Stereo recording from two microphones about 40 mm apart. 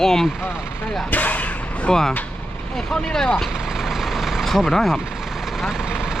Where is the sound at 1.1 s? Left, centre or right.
Left.